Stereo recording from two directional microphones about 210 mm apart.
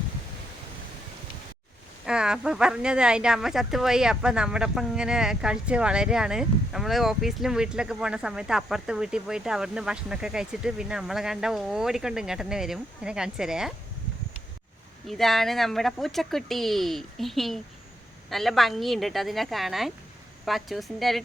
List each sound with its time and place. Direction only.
2.0 s speech: 5° right (ahead or behind)
15.0 s speech: centre (ahead or behind)